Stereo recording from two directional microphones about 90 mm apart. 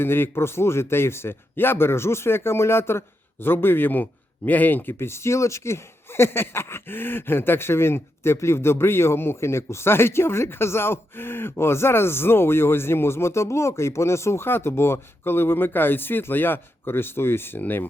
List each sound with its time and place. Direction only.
0.0 s speech: 25° left (ahead or behind)